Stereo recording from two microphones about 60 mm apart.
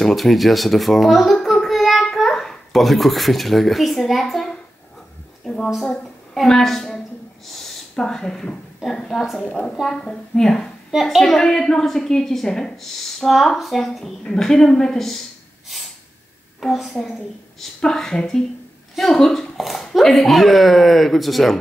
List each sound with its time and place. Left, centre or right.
0.0 s a child's voice: centre
5.4 s a sound: centre
5.7 s a woman's voice: centre
15.7 s snort: centre
16.5 s a woman's voice: centre
17.6 s a woman's voice: centre